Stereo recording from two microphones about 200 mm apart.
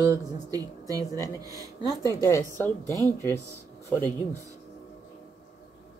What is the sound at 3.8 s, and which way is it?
Speech, 10° left (ahead or behind).